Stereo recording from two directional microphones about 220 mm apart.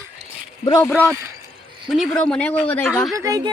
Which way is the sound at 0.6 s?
15° left (ahead or behind).